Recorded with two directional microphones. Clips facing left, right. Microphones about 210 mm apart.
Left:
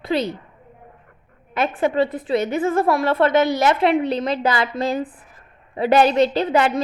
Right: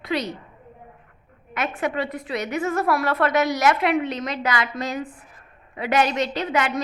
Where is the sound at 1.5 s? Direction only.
30° left (ahead or behind).